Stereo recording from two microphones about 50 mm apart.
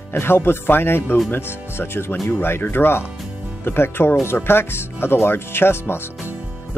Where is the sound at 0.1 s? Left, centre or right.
Left.